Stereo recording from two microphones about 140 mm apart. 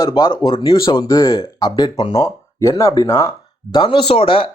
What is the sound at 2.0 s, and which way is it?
Speech, 40° left (ahead or behind).